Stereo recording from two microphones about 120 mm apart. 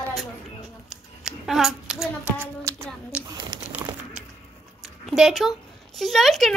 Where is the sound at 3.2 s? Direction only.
35° right (ahead or behind).